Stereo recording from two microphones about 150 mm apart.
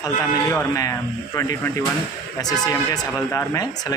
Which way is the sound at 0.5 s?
15° left (ahead or behind).